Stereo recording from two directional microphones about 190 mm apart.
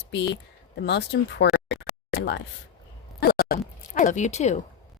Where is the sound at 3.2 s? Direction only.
50° left (ahead or behind).